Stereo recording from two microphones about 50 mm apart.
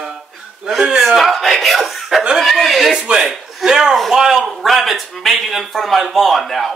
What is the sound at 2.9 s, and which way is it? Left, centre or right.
Speech, centre.